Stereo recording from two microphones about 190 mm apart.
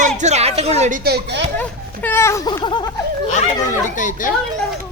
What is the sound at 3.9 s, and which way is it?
Speech, 40° left (ahead or behind).